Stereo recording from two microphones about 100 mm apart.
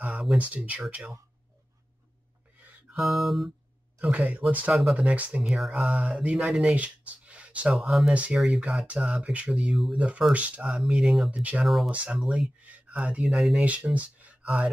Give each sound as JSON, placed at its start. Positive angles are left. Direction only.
{"t": 0.0, "sound": "a sound", "side_deg": -15}
{"t": 0.4, "sound": "speech", "side_deg": -15}
{"t": 2.6, "sound": "music", "side_deg": -15}
{"t": 3.0, "sound": "music", "side_deg": 0}
{"t": 4.0, "sound": "speech", "side_deg": -15}
{"t": 7.7, "sound": "music", "side_deg": 0}
{"t": 8.1, "sound": "speech", "side_deg": -15}
{"t": 11.6, "sound": "music", "side_deg": 0}
{"t": 11.9, "sound": "speech", "side_deg": -15}
{"t": 13.7, "sound": "speech", "side_deg": -15}